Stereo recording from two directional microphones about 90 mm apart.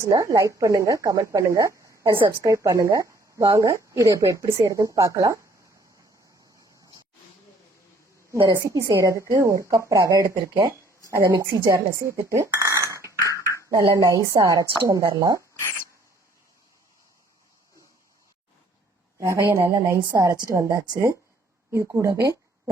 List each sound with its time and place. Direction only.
0.0 s a woman's voice: 35° right (ahead or behind)
8.5 s a woman's voice: 35° right (ahead or behind)
11.3 s a woman's voice: 50° right (ahead or behind)
12.0 s a woman's voice: 30° right (ahead or behind)
12.5 s a sound: 35° right (ahead or behind)
13.9 s a woman's voice: 35° right (ahead or behind)
19.2 s a woman's voice: 30° right (ahead or behind)
20.1 s a woman's voice: 45° right (ahead or behind)